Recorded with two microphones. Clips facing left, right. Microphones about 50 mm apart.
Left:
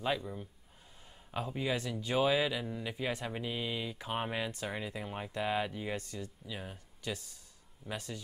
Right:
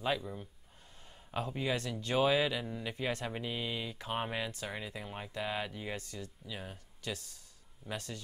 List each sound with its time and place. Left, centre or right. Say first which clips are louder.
0.0 s speech: even; centre
1.0 s a sound: right 1 dB; centre
1.9 s speech: left 1 dB; centre
2.1 s speech: even; centre
7.0 s speech: left 1 dB; left
7.8 s speech: even; centre